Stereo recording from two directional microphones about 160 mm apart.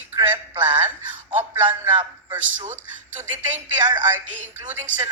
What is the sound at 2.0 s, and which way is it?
A man's voice, 30° right (ahead or behind).